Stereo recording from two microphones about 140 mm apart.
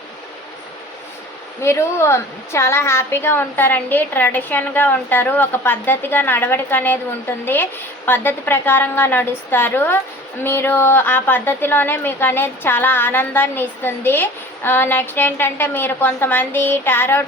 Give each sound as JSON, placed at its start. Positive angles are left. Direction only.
{"t": 1.6, "sound": "a woman's voice", "side_deg": 20}